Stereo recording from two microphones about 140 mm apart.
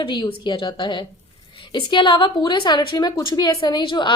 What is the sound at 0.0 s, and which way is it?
A woman's voice, 35° left (ahead or behind).